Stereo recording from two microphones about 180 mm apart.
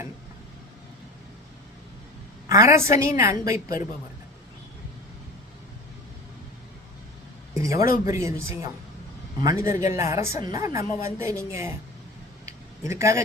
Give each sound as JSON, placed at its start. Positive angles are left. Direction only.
{"t": 2.5, "sound": "a woman's voice", "side_deg": -15}
{"t": 7.5, "sound": "a woman's voice", "side_deg": -15}
{"t": 12.5, "sound": "a sound", "side_deg": -15}